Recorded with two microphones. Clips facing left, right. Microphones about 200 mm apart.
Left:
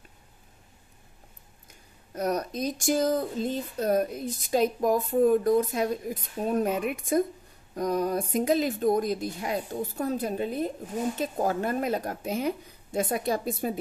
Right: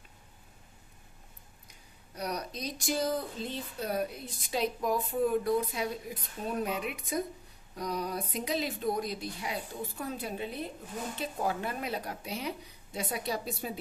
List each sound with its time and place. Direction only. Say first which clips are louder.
2.1 s speech: left 8 dB; 50° left (ahead or behind)